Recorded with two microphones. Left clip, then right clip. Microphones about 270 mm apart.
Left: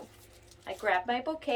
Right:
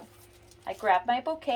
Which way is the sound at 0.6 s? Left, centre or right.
Right.